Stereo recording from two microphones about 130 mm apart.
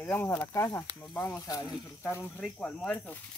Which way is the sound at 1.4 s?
30° left (ahead or behind).